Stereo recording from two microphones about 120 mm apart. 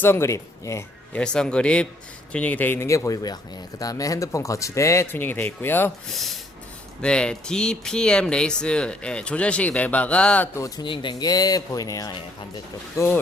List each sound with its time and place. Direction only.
0.0 s speech: 20° left (ahead or behind)
1.1 s speech: 5° left (ahead or behind)
6.1 s speech: centre (ahead or behind)
10.5 s speech: 25° left (ahead or behind)
10.8 s speech: 40° left (ahead or behind); by 13.1 s 25° left (ahead or behind)